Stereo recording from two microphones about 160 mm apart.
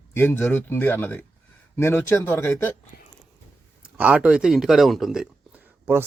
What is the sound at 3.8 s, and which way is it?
Speech, 10° right (ahead or behind).